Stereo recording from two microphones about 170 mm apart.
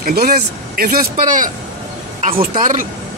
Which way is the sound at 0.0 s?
65° right (ahead or behind).